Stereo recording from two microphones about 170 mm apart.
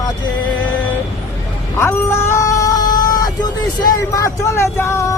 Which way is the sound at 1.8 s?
15° left (ahead or behind).